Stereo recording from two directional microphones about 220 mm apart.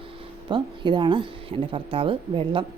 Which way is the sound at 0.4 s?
20° right (ahead or behind).